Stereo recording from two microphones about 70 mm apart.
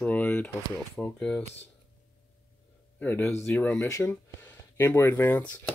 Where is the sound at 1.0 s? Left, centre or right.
Centre.